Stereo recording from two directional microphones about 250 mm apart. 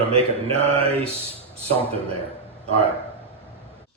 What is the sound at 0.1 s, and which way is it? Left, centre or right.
Mantra, right.